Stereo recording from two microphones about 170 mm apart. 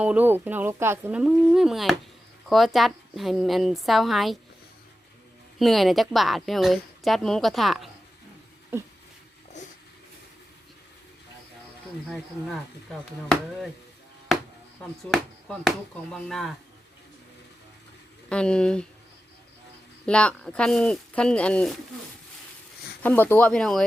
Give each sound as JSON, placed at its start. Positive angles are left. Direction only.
{"t": 0.0, "sound": "a woman's voice", "side_deg": -10}
{"t": 5.5, "sound": "a woman's voice", "side_deg": 0}
{"t": 8.7, "sound": "speech", "side_deg": -15}
{"t": 9.5, "sound": "a sound", "side_deg": 45}
{"t": 12.0, "sound": "a woman's voice", "side_deg": 0}
{"t": 15.1, "sound": "a woman's voice", "side_deg": 0}
{"t": 18.3, "sound": "a woman's voice", "side_deg": 5}
{"t": 20.1, "sound": "a woman's voice", "side_deg": 5}
{"t": 23.0, "sound": "speech", "side_deg": 10}